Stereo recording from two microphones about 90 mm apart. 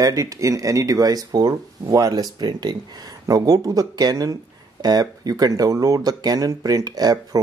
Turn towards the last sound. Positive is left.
turn(degrees=-45)  # may be behind; listen again after turning